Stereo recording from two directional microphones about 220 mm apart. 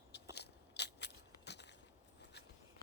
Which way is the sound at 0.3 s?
50° left (ahead or behind).